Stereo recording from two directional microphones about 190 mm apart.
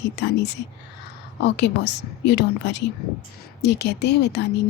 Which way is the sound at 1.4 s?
65° left (ahead or behind).